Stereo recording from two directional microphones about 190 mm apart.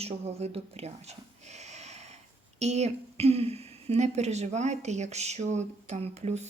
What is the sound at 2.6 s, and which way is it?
A woman's voice, 35° right (ahead or behind).